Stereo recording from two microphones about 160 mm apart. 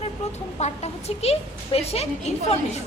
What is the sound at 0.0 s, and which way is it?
A woman's voice, 45° left (ahead or behind).